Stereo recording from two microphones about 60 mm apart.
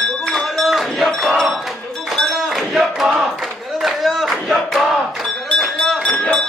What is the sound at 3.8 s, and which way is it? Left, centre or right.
Crowd, centre.